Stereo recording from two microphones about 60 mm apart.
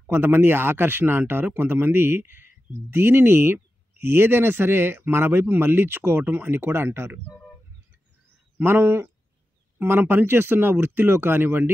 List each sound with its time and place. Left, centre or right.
0.1 s speech: right
8.6 s speech: right